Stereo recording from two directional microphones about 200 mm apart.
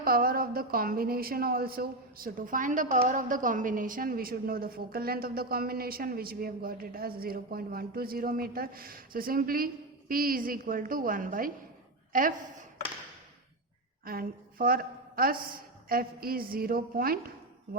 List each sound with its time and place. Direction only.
0.0 s a woman's voice: 45° right (ahead or behind)
14.0 s a woman's voice: 45° right (ahead or behind)